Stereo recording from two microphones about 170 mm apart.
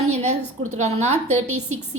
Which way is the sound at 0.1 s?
40° right (ahead or behind).